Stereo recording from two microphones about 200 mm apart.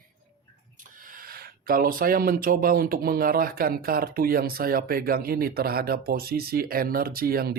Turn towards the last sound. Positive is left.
turn(degrees=-50)  # may be behind; listen again after turning